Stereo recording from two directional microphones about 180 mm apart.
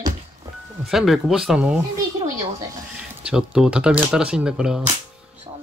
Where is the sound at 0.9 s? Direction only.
Centre (ahead or behind).